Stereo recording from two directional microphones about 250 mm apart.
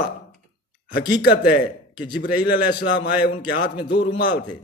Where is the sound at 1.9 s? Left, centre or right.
Centre.